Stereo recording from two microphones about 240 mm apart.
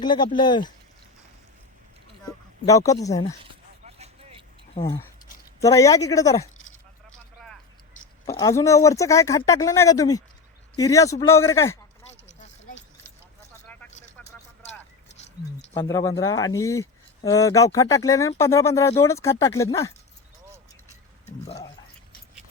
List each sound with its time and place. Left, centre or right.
0.0 s speech: centre
2.2 s speech: centre
3.5 s vehicle: right
4.7 s speech: centre
8.3 s speech: centre
14.0 s vehicle: centre
15.7 s speech: centre